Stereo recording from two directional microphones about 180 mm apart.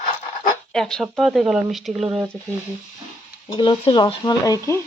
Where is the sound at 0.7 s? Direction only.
5° left (ahead or behind).